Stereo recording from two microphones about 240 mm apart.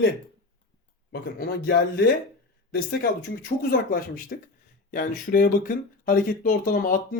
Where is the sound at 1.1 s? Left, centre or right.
Left.